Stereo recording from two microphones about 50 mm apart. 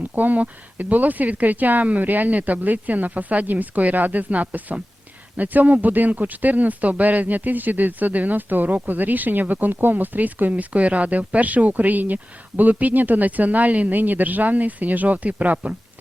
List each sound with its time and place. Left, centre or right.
0.2 s speech: right